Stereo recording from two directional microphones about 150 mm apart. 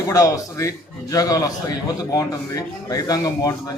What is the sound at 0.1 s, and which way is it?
A man's voice, 20° left (ahead or behind).